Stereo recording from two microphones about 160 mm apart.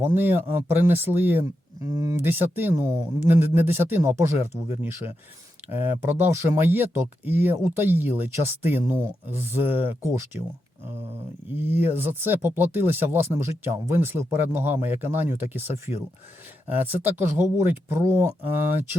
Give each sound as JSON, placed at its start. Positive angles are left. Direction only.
{"t": 0.0, "sound": "speech", "side_deg": -15}
{"t": 5.6, "sound": "speech", "side_deg": -10}
{"t": 11.5, "sound": "speech", "side_deg": -10}
{"t": 16.7, "sound": "speech", "side_deg": -10}